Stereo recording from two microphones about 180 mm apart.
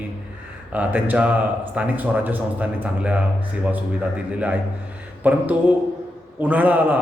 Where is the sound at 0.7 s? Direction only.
10° right (ahead or behind).